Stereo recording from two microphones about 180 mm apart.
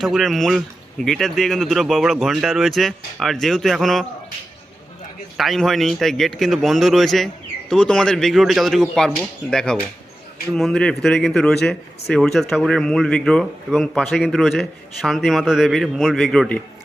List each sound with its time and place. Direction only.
0.0 s speech: centre (ahead or behind)
5.4 s speech: centre (ahead or behind)